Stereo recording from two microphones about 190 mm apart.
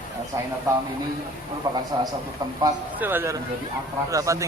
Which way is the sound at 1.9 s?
20° right (ahead or behind).